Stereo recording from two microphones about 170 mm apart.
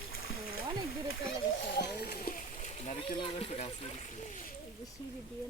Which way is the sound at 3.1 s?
35° left (ahead or behind).